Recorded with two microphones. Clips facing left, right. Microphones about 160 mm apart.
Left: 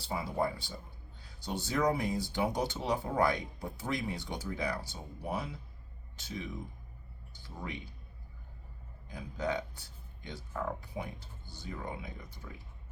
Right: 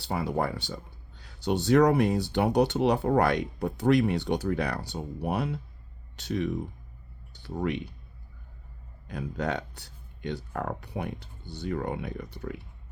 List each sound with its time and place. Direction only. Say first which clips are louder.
0.0 s speech: right 5 dB; 70° right (ahead or behind)
9.0 s speech: right 5 dB; 70° right (ahead or behind)